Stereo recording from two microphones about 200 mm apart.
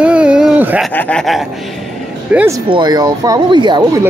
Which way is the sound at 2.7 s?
20° right (ahead or behind).